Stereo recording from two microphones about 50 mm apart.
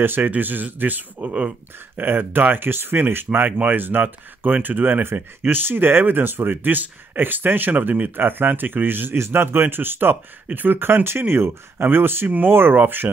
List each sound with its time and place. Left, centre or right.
0.0 s speech: right